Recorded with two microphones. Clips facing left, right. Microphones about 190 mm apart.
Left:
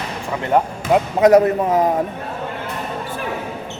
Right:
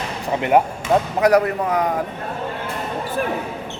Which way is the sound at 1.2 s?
25° left (ahead or behind).